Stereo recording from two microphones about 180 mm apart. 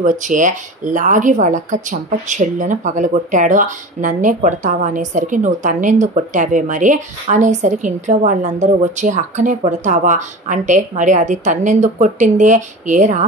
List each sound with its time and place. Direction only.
0.0 s speech: 45° right (ahead or behind)